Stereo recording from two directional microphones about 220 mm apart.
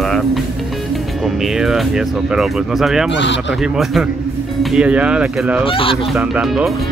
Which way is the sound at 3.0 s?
55° left (ahead or behind).